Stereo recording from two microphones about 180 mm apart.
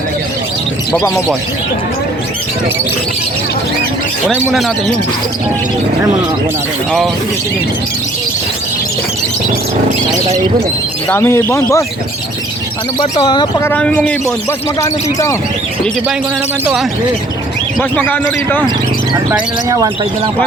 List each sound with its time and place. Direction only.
11.1 s a man's voice: 10° left (ahead or behind)
13.0 s speech: 25° left (ahead or behind)
13.7 s a man's voice: 5° left (ahead or behind)
17.7 s a man's voice: 10° left (ahead or behind)
19.3 s speech: 20° right (ahead or behind)